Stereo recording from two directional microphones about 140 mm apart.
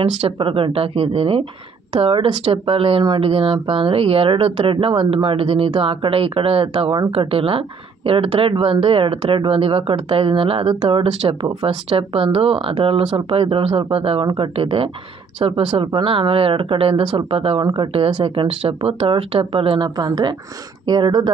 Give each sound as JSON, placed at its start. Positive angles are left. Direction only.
{"t": 0.2, "sound": "speech", "side_deg": -40}